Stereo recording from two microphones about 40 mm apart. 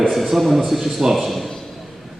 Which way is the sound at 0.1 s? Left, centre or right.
Centre.